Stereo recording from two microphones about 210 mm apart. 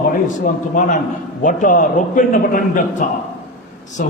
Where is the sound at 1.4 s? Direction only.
40° left (ahead or behind).